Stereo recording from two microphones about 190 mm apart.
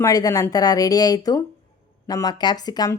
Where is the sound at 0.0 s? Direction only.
20° left (ahead or behind).